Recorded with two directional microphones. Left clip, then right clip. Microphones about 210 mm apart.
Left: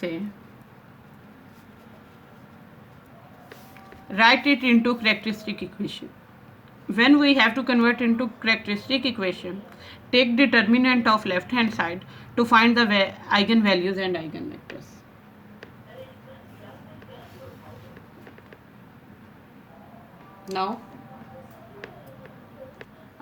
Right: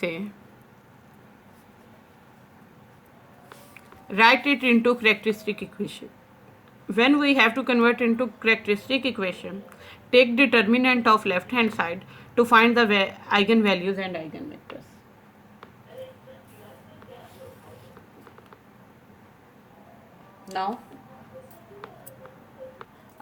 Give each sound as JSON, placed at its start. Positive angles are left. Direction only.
{"t": 4.1, "sound": "a woman's voice", "side_deg": -30}